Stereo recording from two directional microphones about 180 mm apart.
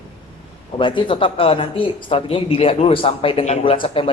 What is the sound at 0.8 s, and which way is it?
Speech, 25° left (ahead or behind).